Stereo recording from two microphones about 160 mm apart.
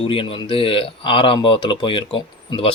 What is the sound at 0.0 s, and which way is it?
Speech, 35° left (ahead or behind).